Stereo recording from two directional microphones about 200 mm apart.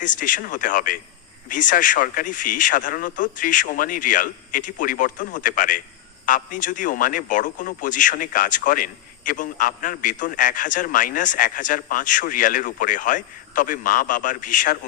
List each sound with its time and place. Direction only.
0.0 s a man's voice: 40° left (ahead or behind)